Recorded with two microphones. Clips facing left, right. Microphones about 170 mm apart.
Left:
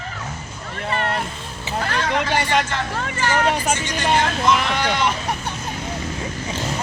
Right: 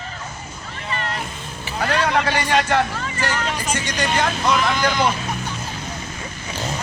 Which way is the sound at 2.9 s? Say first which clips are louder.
Left 3 dB; 60° left (ahead or behind).